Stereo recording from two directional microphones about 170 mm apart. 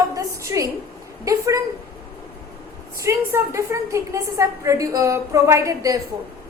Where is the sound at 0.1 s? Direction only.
20° right (ahead or behind).